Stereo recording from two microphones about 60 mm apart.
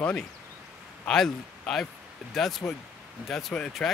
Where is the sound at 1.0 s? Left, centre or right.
Centre.